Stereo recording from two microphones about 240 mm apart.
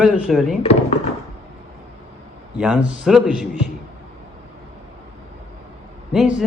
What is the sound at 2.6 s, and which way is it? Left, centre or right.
Speech, centre.